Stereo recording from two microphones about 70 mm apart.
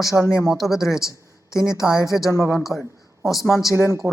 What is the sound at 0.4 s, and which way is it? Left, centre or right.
Speech, centre.